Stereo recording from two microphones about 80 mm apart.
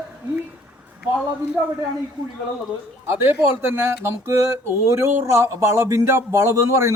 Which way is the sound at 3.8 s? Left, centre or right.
Right.